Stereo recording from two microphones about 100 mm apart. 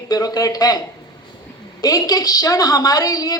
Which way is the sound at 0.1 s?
40° left (ahead or behind).